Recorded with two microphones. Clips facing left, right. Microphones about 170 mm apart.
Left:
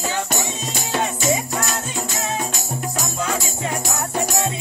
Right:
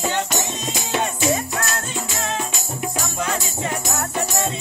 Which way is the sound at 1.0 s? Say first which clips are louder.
Even; 10° left (ahead or behind).